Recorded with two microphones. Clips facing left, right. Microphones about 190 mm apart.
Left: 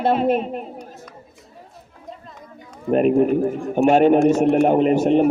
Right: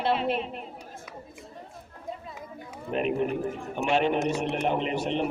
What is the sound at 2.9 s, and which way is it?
A man's voice, 45° left (ahead or behind).